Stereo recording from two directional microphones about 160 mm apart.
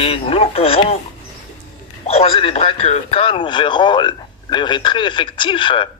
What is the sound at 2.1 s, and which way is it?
Speech, 40° left (ahead or behind).